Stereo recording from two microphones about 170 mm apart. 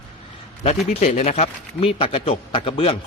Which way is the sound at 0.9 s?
40° left (ahead or behind).